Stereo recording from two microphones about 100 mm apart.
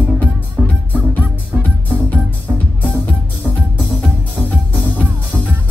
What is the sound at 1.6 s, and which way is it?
Music, 20° left (ahead or behind).